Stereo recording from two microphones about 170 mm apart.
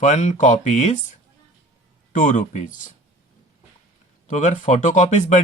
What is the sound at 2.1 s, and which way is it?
Speech, 50° left (ahead or behind).